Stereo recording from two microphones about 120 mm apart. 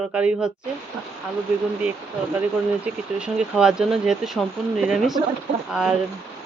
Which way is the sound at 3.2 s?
5° right (ahead or behind).